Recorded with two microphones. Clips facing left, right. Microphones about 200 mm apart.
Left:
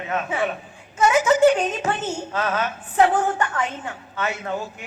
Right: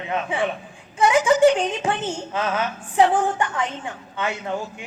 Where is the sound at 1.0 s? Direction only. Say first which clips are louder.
Even; 15° right (ahead or behind).